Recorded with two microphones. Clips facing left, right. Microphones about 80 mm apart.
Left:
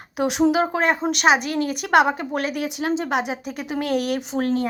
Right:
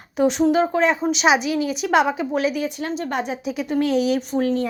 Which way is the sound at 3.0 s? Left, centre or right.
Left.